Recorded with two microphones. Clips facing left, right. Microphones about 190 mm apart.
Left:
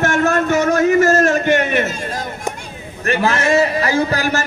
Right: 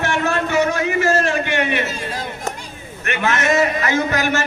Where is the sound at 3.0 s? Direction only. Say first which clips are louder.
Left 3 dB; 35° left (ahead or behind).